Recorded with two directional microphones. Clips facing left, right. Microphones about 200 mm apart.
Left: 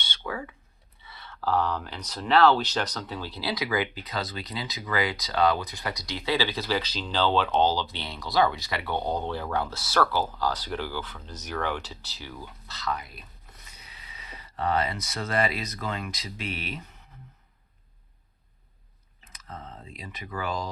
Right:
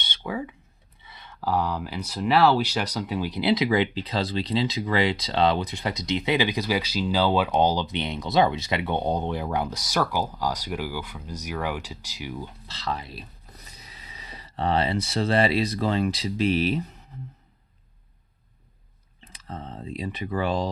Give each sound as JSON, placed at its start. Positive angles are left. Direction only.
{"t": 0.0, "sound": "a sound", "side_deg": -20}
{"t": 1.0, "sound": "speech", "side_deg": -15}
{"t": 19.2, "sound": "speech", "side_deg": -30}